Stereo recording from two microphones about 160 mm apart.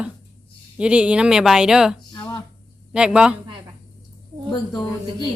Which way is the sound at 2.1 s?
25° left (ahead or behind).